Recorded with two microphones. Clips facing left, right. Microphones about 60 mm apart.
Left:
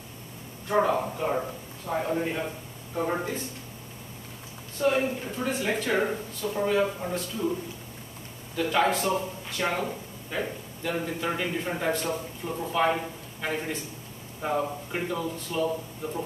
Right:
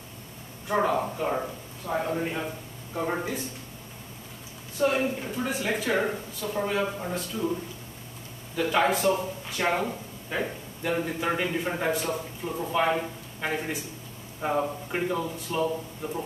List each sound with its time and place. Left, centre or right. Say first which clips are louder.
0.7 s a man's voice: left 1 dB; centre
4.8 s a man's voice: even; centre
8.5 s a man's voice: even; centre